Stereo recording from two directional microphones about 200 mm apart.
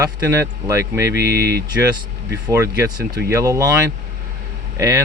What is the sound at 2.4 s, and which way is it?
Speech, 15° right (ahead or behind).